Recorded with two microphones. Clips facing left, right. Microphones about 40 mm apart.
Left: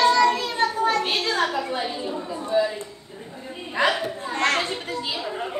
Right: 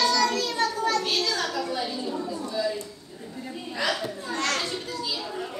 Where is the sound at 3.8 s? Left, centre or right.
Left.